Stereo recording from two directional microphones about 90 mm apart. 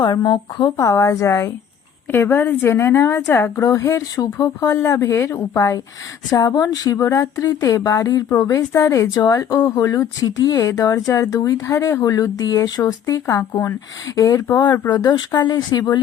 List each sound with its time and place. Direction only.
0.0 s a woman's voice: 50° left (ahead or behind)
14.6 s speech: 55° left (ahead or behind)